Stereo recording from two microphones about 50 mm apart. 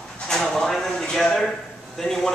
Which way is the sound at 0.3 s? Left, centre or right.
Centre.